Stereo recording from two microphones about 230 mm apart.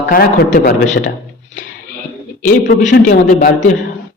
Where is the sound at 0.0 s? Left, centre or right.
Left.